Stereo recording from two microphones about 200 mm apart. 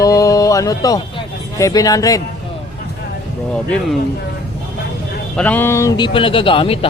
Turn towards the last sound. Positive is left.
turn(degrees=30)  # may be behind; listen again after turning